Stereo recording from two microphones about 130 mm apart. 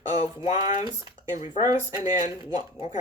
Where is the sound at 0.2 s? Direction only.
55° left (ahead or behind).